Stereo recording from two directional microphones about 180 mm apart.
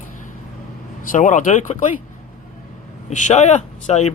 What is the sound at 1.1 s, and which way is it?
Speech, 45° left (ahead or behind).